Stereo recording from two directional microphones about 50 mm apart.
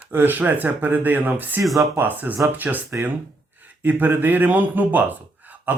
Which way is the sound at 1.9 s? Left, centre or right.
Right.